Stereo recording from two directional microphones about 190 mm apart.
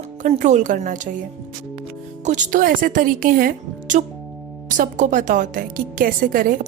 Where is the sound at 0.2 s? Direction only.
40° right (ahead or behind).